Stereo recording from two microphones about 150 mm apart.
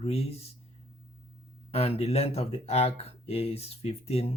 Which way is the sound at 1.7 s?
45° left (ahead or behind).